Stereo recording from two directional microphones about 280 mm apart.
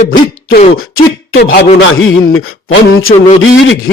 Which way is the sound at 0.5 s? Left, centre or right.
Left.